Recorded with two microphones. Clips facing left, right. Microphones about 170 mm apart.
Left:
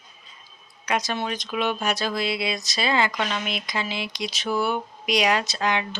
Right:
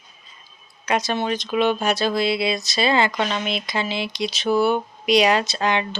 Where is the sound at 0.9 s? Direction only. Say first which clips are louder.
Right 4 dB; 30° right (ahead or behind).